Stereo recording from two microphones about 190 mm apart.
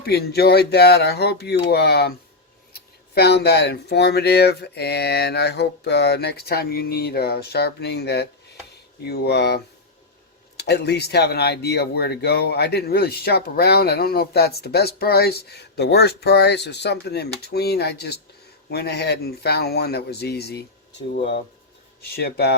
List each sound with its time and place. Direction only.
0.0 s speech: 60° left (ahead or behind)
10.6 s speech: 60° left (ahead or behind)
22.1 s speech: 55° left (ahead or behind)